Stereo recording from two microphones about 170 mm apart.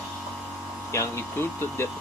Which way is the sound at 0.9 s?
15° left (ahead or behind).